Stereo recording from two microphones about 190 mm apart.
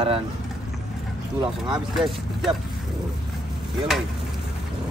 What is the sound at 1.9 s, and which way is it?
Speech, centre (ahead or behind).